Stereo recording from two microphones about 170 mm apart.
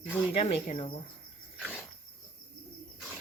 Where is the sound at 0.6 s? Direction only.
45° left (ahead or behind).